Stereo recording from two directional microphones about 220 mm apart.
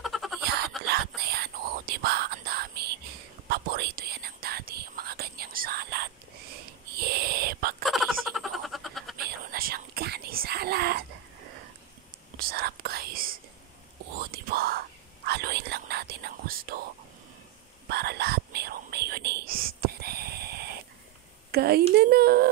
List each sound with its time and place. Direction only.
0.0 s a sound: centre (ahead or behind)
0.7 s whispering: centre (ahead or behind)
1.3 s whispering: 45° right (ahead or behind)
7.0 s owl: 45° right (ahead or behind)
7.8 s a sound: centre (ahead or behind)
9.5 s whispering: 45° right (ahead or behind)
12.4 s whispering: 45° right (ahead or behind)
17.8 s whispering: 45° right (ahead or behind)
21.5 s a sound: 45° right (ahead or behind)